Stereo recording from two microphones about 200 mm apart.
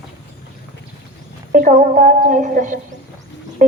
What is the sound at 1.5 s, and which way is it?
A woman's voice, 40° right (ahead or behind).